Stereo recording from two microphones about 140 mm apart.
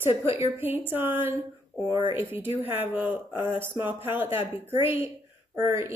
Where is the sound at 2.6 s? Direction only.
15° right (ahead or behind).